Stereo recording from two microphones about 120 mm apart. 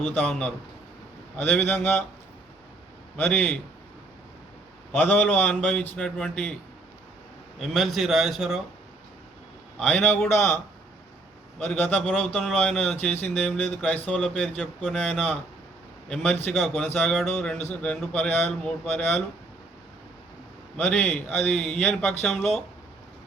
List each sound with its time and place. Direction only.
0.1 s a man's voice: 10° left (ahead or behind)
3.2 s a man's voice: 15° left (ahead or behind)
4.9 s a man's voice: 15° left (ahead or behind)
7.6 s a man's voice: centre (ahead or behind)
9.7 s a man's voice: 10° left (ahead or behind)
11.7 s a man's voice: 10° left (ahead or behind)
20.7 s a man's voice: 15° left (ahead or behind)